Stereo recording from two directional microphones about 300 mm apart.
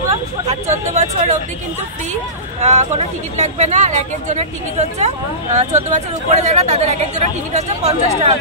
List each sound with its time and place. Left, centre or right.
0.9 s speech: right
2.6 s speech: right